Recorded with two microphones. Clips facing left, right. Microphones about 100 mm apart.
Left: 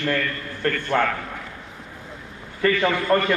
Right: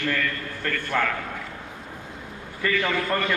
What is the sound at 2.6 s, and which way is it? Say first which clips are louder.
Speech: left 4 dB; 30° left (ahead or behind).